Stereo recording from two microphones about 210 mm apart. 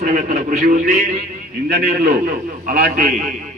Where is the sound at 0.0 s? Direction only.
35° right (ahead or behind).